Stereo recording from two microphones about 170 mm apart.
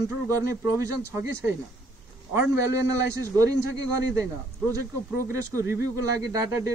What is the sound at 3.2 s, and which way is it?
Speech, 20° right (ahead or behind).